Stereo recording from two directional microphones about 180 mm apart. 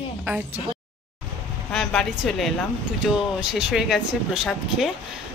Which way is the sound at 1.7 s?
Centre (ahead or behind).